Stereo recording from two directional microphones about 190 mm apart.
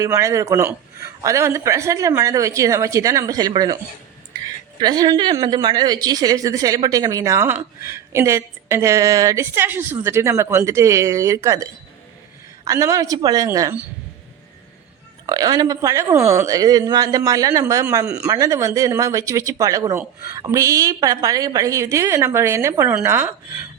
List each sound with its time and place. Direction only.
0.0 s speech: 15° right (ahead or behind)
4.8 s speech: 20° right (ahead or behind)
15.3 s speech: 20° right (ahead or behind)